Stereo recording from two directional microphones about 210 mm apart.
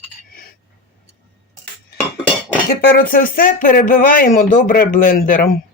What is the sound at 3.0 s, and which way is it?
Speech, 40° left (ahead or behind).